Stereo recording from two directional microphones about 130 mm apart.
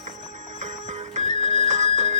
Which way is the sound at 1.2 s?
60° right (ahead or behind).